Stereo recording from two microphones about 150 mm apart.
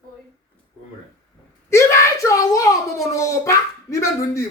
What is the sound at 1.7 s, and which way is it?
Speech, 20° left (ahead or behind).